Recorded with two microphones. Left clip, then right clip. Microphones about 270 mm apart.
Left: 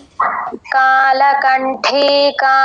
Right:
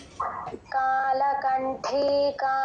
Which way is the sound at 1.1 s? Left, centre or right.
Left.